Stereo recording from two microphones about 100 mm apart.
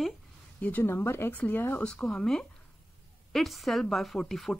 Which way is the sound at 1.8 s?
10° left (ahead or behind).